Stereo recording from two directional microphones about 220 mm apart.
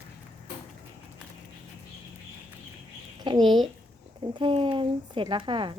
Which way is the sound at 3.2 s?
20° right (ahead or behind).